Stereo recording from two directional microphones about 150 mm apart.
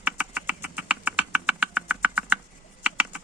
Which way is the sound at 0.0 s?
10° right (ahead or behind).